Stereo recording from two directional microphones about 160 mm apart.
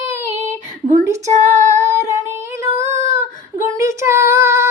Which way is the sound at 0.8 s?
25° right (ahead or behind).